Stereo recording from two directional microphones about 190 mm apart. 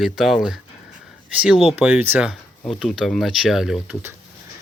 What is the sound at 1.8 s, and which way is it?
Speech, 10° right (ahead or behind).